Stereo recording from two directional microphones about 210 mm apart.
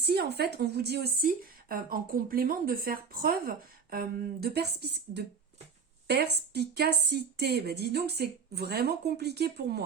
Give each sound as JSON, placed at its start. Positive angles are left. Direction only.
{"t": 0.0, "sound": "speech", "side_deg": -50}
{"t": 6.5, "sound": "speech", "side_deg": -50}